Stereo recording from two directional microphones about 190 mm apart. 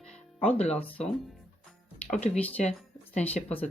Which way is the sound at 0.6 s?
35° left (ahead or behind).